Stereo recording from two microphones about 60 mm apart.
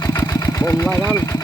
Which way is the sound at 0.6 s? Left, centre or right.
Left.